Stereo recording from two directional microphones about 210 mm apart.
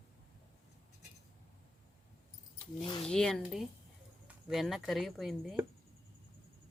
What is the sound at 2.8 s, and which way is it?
Speech, 25° left (ahead or behind).